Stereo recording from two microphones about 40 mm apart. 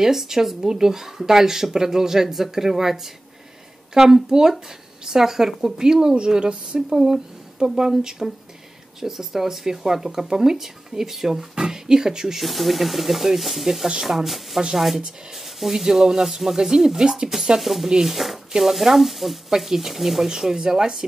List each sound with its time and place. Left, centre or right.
0.0 s a woman's voice: centre
6.9 s speech: centre
11.5 s speech: centre
12.4 s speech: centre
17.6 s speech: centre
17.8 s speech: centre
18.1 s speech: centre